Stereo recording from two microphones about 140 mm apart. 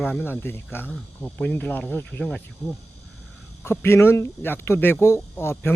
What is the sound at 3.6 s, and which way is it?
A man's voice, 20° left (ahead or behind).